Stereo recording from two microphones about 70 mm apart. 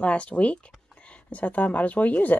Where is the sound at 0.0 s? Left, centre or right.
Centre.